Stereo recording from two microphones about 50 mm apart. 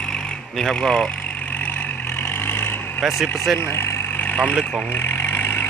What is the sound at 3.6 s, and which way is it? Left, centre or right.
Vehicle, left.